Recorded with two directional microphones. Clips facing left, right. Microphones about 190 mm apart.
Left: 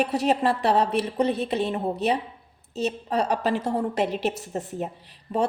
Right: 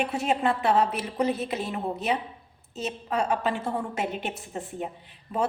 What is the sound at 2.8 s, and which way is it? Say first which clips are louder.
A woman's voice: left 3 dB; 35° left (ahead or behind).